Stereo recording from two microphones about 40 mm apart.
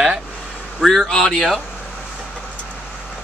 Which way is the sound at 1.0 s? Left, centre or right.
Centre.